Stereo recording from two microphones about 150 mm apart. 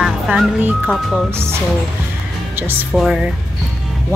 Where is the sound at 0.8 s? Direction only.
Centre (ahead or behind).